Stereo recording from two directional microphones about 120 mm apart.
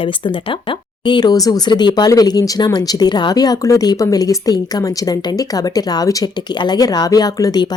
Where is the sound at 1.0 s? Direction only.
35° left (ahead or behind).